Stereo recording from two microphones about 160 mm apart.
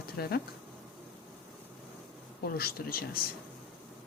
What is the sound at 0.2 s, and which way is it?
Speech, 75° left (ahead or behind).